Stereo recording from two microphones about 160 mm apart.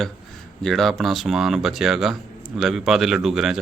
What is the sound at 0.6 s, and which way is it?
Speech, centre (ahead or behind).